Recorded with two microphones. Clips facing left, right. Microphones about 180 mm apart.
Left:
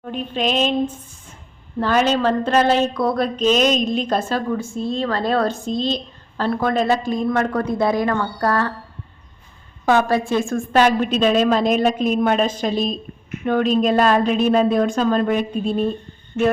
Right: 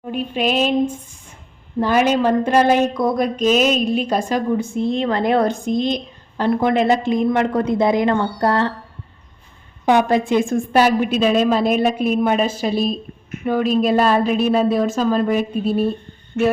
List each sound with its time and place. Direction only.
0.0 s a woman's voice: 10° right (ahead or behind)
9.8 s a woman's voice: 15° right (ahead or behind)